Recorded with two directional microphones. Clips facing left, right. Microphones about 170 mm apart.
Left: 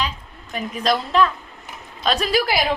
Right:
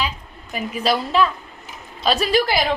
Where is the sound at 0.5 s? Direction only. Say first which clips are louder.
Even; 5° right (ahead or behind).